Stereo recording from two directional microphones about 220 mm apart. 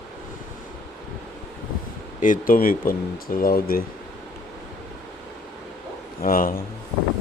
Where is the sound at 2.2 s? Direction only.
40° left (ahead or behind).